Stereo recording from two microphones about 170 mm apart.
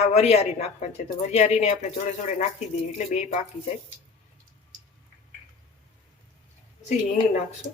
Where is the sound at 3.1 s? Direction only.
40° left (ahead or behind).